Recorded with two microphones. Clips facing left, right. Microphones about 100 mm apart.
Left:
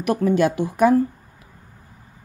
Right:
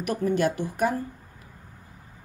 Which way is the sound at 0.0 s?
90° left.